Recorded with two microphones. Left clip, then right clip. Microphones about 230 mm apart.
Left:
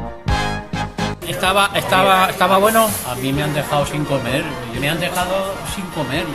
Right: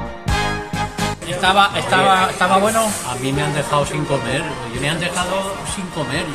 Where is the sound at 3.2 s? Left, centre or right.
Centre.